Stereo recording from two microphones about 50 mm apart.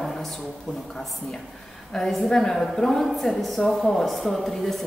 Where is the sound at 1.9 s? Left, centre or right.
Centre.